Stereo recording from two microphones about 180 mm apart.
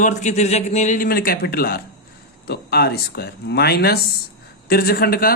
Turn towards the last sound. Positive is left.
turn(degrees=55)  # may be behind; listen again after turning